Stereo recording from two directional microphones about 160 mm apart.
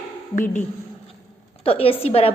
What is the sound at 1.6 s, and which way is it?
Speech, 35° left (ahead or behind).